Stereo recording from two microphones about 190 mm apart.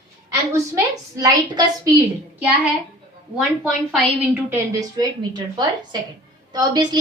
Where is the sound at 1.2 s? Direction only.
20° right (ahead or behind).